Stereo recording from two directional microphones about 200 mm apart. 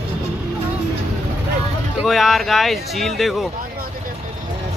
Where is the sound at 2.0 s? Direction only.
Centre (ahead or behind).